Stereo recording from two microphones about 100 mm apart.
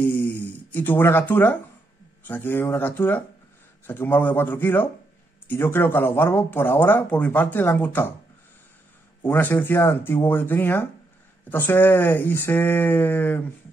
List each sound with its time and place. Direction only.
0.0 s a sound: 15° left (ahead or behind)
2.2 s speech: 20° left (ahead or behind)
9.2 s speech: 20° left (ahead or behind)